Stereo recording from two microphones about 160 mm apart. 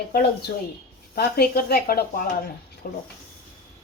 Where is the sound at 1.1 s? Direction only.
75° left (ahead or behind).